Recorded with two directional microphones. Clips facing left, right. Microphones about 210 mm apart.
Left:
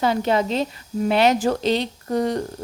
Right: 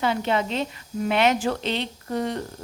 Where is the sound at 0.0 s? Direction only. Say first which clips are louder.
Left 4 dB; 40° left (ahead or behind).